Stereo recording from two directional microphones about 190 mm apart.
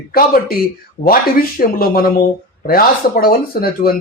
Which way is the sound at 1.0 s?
50° left (ahead or behind).